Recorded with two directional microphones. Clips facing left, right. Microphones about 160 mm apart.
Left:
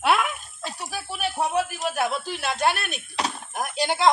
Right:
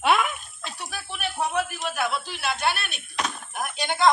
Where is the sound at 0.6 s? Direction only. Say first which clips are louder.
Left 4 dB; 40° left (ahead or behind).